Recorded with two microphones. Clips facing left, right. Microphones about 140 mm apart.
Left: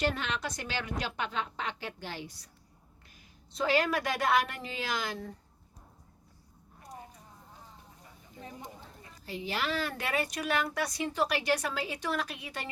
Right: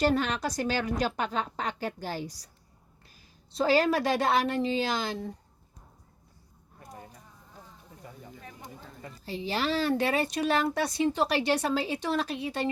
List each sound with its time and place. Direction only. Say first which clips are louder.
0.0 s a woman's voice: right 6 dB; 40° right (ahead or behind)
3.5 s speech: right 4 dB; 35° right (ahead or behind)
9.2 s speech: right 4 dB; 30° right (ahead or behind)